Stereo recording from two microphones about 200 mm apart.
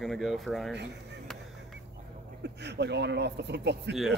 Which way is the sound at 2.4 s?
60° right (ahead or behind).